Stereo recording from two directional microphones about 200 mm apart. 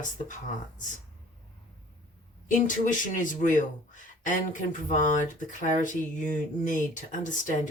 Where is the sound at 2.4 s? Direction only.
40° left (ahead or behind).